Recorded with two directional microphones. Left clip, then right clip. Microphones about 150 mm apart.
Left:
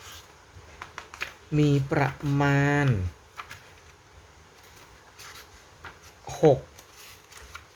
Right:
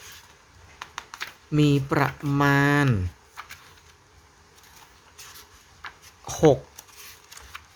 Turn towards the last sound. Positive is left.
turn(degrees=-30)  # may be behind; listen again after turning